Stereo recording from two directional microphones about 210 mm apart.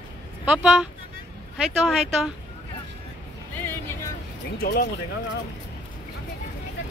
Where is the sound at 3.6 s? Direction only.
10° left (ahead or behind).